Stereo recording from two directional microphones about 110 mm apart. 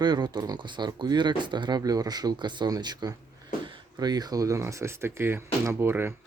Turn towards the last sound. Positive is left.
turn(degrees=-20)  # may be behind; listen again after turning